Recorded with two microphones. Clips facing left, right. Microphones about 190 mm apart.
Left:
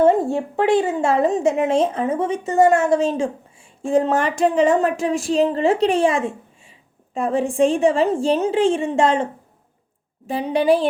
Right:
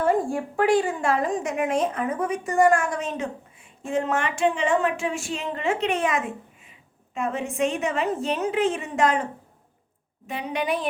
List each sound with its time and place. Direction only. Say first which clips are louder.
0.0 s a woman's voice: left 6 dB; 25° left (ahead or behind)